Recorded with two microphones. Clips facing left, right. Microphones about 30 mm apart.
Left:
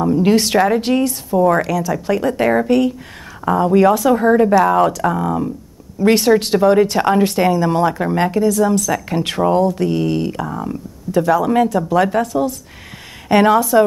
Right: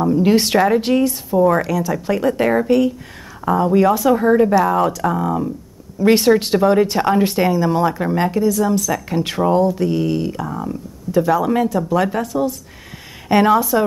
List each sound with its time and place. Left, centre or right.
0.0 s speech: centre
13.3 s speech: centre